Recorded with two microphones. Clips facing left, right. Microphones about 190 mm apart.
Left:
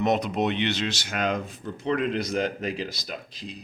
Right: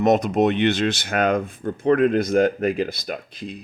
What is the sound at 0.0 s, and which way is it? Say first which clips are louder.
Speech: right 6 dB; 45° right (ahead or behind).